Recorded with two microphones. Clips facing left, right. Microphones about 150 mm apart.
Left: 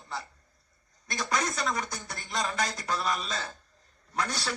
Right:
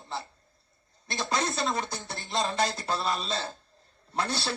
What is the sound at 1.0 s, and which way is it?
Speech, 30° right (ahead or behind).